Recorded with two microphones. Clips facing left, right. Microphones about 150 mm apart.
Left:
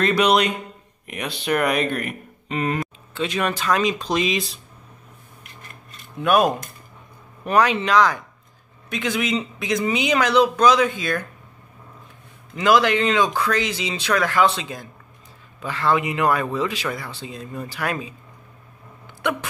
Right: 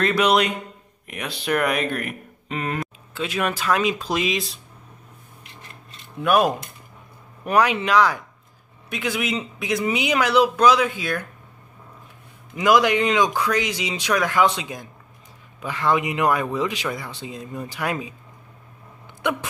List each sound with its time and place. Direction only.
0.0 s speech: centre (ahead or behind)
6.2 s speech: 5° right (ahead or behind)
12.5 s speech: 15° right (ahead or behind)